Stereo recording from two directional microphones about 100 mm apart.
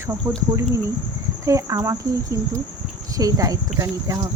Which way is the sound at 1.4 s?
30° right (ahead or behind).